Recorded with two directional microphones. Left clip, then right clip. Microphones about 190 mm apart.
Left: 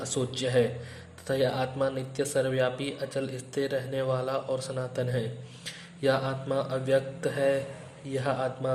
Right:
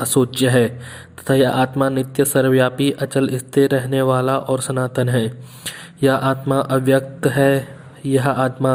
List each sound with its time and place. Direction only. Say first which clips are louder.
0.1 s speech: right 11 dB; 40° right (ahead or behind)